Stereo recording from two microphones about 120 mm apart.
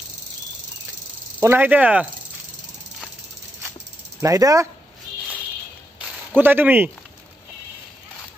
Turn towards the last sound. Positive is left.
turn(degrees=-15)  # may be behind; listen again after turning